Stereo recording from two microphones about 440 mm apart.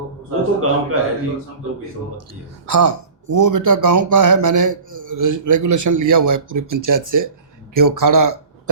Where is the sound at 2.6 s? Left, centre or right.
Right.